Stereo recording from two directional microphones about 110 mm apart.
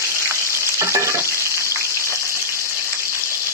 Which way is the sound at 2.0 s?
25° right (ahead or behind).